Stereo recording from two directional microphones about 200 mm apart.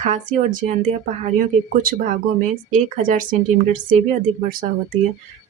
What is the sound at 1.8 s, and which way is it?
A woman's voice, 45° right (ahead or behind).